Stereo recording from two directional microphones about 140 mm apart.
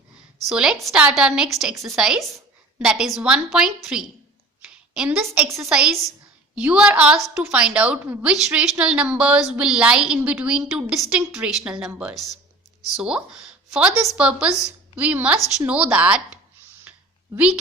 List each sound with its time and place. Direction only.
0.4 s a woman's voice: 5° right (ahead or behind)
4.6 s a sound: 5° right (ahead or behind)
5.6 s a woman's voice: 5° right (ahead or behind)
8.3 s a woman's voice: 5° right (ahead or behind)